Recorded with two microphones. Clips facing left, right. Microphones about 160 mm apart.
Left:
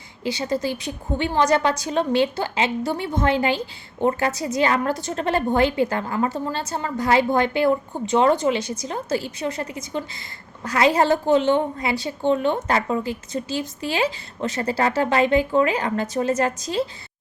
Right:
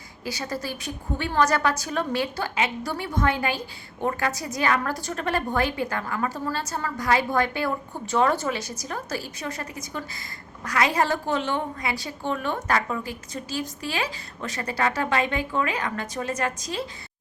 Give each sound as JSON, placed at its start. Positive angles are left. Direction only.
{"t": 0.3, "sound": "a woman's voice", "side_deg": 25}